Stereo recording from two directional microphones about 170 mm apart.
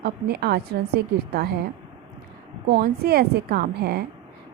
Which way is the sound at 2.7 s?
65° right (ahead or behind).